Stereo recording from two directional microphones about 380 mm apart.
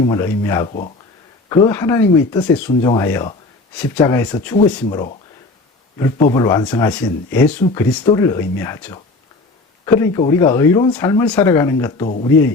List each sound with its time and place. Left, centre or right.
0.0 s speech: centre
6.3 s speech: centre